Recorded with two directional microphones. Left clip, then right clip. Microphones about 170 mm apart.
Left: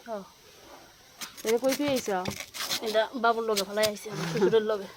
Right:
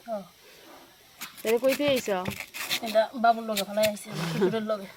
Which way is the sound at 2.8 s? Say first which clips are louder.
Right 3 dB; 50° left (ahead or behind).